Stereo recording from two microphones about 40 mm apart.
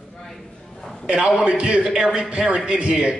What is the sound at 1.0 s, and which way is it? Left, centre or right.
A man's voice, right.